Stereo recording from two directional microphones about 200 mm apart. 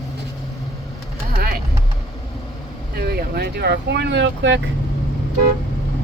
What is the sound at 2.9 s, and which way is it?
Speech, 50° right (ahead or behind).